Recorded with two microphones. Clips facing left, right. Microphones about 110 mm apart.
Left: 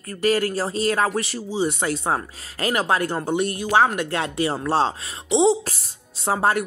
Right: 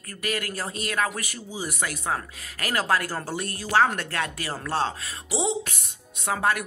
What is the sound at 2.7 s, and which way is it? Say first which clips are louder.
Speech: left 3 dB; 20° left (ahead or behind).